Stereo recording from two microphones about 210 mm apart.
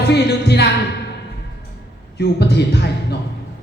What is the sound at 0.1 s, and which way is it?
Music, 50° left (ahead or behind).